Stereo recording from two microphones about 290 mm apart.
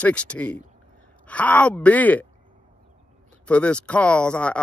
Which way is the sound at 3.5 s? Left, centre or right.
Centre.